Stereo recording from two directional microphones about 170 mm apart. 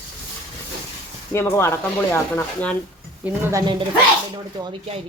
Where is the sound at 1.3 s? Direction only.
15° left (ahead or behind).